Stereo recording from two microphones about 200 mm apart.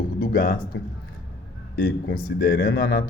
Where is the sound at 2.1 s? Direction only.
45° left (ahead or behind).